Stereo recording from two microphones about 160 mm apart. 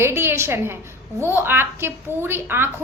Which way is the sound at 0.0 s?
15° right (ahead or behind).